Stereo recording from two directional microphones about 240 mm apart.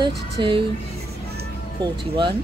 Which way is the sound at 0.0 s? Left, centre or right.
Right.